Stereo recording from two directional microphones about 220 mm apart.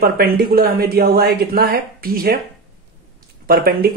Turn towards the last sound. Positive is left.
turn(degrees=-45)  # may be behind; listen again after turning